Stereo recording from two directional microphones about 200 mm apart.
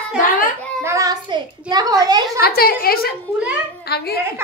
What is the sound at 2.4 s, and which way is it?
A woman's voice, 50° left (ahead or behind).